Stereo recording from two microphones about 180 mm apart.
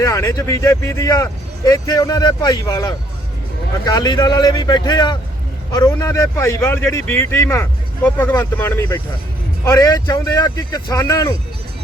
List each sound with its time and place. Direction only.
0.0 s a man's voice: 20° left (ahead or behind)